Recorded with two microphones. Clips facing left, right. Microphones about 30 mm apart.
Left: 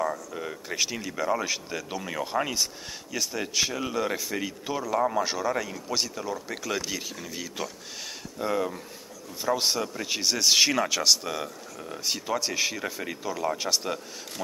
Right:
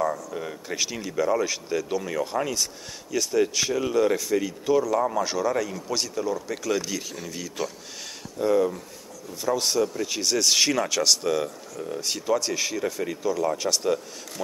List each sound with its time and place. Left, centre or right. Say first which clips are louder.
0.0 s speech: right 3 dB; centre